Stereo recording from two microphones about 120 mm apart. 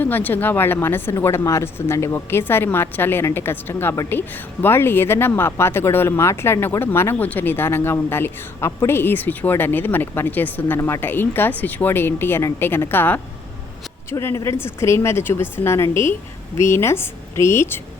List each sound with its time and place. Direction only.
0.0 s a woman's voice: 15° left (ahead or behind)